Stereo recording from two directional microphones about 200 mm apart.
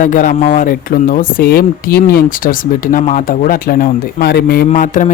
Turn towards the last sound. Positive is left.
turn(degrees=40)  # may be behind; listen again after turning